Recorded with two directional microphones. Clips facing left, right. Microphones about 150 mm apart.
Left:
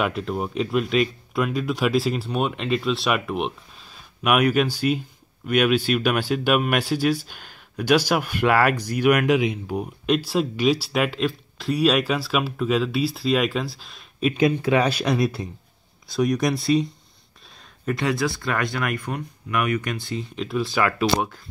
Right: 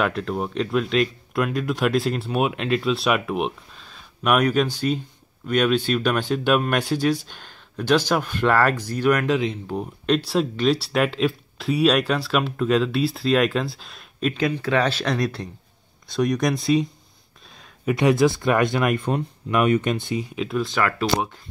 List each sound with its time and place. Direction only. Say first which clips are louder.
0.0 s speech: right 1 dB; 5° left (ahead or behind)
14.3 s speech: left 3 dB; 20° left (ahead or behind); by 16.8 s centre (ahead or behind)
17.8 s speech: right 6 dB; 15° right (ahead or behind)
20.3 s speech: left 2 dB; centre (ahead or behind)